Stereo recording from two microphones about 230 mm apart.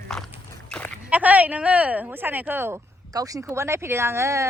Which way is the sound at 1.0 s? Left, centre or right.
Centre.